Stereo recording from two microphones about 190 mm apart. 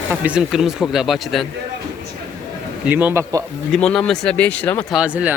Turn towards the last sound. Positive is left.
turn(degrees=-5)  # may be behind; listen again after turning